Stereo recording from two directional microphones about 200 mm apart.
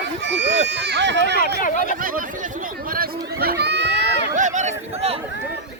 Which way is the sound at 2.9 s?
50° right (ahead or behind).